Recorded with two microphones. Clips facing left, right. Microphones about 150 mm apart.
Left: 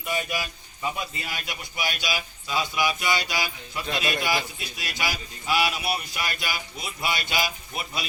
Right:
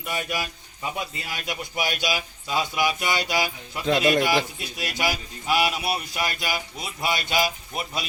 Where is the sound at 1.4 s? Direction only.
50° right (ahead or behind).